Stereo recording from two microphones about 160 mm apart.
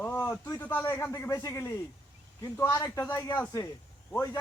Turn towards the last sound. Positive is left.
turn(degrees=15)  # may be behind; listen again after turning